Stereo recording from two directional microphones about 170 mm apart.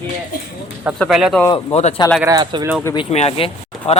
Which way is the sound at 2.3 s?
20° right (ahead or behind).